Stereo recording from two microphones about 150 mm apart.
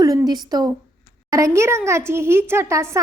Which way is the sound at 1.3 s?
20° right (ahead or behind).